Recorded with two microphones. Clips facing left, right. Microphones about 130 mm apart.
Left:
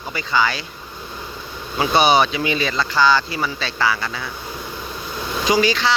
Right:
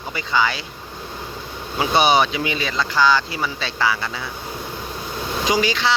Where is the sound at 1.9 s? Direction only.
15° right (ahead or behind).